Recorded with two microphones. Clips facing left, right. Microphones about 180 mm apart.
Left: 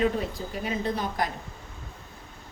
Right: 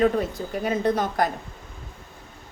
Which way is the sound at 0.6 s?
50° right (ahead or behind).